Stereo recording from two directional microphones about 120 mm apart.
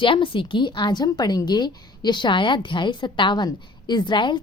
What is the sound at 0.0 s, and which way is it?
A woman's voice, 45° left (ahead or behind).